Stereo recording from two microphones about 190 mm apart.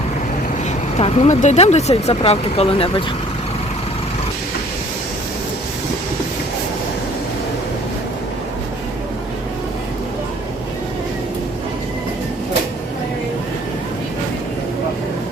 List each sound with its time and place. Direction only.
0.9 s speech: 35° left (ahead or behind)